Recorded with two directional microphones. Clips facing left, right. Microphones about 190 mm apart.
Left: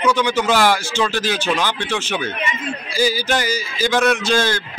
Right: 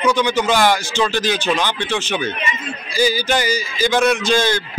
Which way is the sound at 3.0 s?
5° left (ahead or behind).